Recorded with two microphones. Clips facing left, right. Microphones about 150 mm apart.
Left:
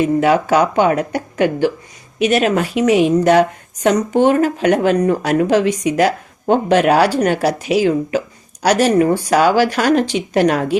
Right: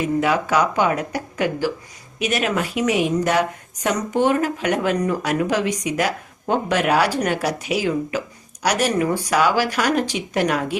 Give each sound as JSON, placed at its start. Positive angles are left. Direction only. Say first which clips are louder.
{"t": 0.0, "sound": "a woman's voice", "louder": "left 6 dB", "side_deg": 30}